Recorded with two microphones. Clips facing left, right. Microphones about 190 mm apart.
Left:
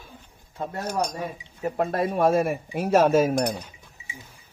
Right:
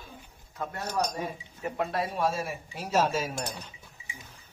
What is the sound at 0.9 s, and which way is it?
Speech, 10° left (ahead or behind).